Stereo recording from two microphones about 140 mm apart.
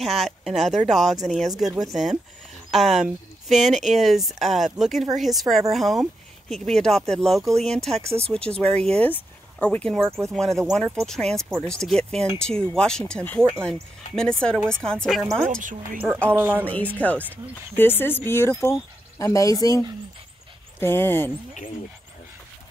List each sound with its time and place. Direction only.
0.0 s speech: centre (ahead or behind)
15.6 s speech: 70° right (ahead or behind)
16.3 s a woman's voice: 15° right (ahead or behind)
16.6 s speech: 10° left (ahead or behind)
20.8 s speech: 15° left (ahead or behind)